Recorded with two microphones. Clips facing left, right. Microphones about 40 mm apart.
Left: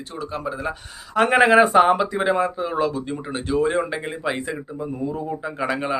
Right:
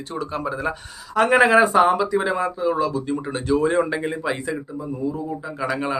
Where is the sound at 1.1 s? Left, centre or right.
Centre.